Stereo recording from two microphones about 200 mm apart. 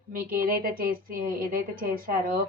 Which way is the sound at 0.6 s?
45° right (ahead or behind).